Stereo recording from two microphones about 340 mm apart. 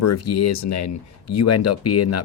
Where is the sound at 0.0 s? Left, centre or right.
Left.